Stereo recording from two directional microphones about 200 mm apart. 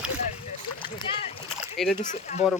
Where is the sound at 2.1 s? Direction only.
40° left (ahead or behind).